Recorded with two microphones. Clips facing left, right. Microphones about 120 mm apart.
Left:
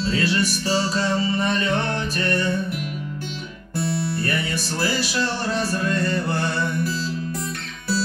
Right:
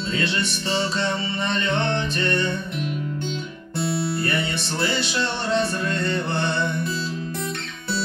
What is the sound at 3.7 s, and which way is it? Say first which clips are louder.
Music: even; 25° right (ahead or behind).